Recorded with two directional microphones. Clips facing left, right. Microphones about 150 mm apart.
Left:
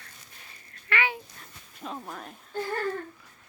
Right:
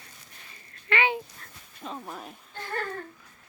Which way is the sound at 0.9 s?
20° right (ahead or behind).